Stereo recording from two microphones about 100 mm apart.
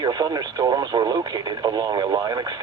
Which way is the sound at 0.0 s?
45° right (ahead or behind).